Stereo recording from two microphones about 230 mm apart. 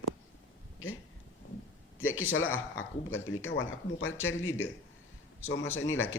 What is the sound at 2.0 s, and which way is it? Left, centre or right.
Speech, left.